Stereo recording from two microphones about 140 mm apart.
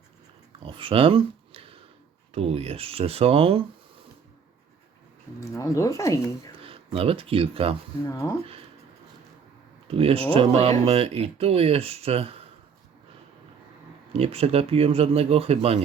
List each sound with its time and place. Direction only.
0.6 s a sound: 40° right (ahead or behind)
2.3 s speech: 45° right (ahead or behind)
5.4 s speech: 25° left (ahead or behind)
6.6 s speech: 40° right (ahead or behind)
8.0 s speech: 25° left (ahead or behind)
9.9 s speech: 45° right (ahead or behind)
14.1 s speech: 45° right (ahead or behind)